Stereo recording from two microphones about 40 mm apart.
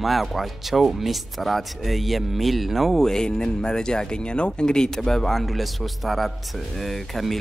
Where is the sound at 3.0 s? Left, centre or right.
Centre.